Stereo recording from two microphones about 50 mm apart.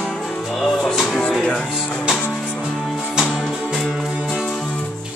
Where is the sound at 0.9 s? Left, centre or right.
Centre.